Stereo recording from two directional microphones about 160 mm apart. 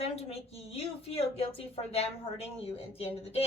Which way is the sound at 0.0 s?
35° left (ahead or behind).